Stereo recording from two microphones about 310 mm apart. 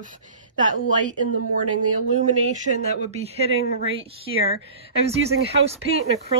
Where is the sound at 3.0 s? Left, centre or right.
Centre.